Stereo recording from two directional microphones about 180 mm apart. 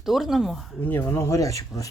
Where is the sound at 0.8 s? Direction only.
10° left (ahead or behind).